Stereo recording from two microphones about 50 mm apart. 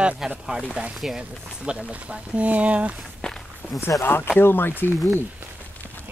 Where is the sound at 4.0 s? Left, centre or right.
Left.